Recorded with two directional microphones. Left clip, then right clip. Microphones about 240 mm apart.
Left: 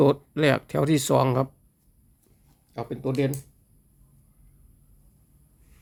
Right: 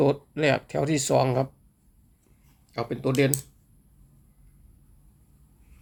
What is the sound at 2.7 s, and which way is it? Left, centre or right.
Speech, centre.